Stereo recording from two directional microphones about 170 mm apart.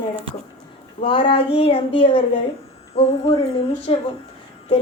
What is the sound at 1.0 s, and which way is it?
A woman's voice, 30° left (ahead or behind).